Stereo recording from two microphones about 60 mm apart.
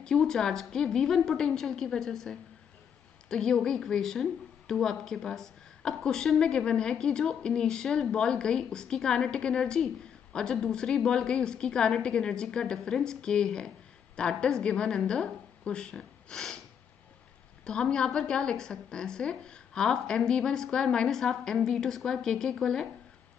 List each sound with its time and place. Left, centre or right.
0.0 s a woman's voice: centre
17.6 s a woman's voice: centre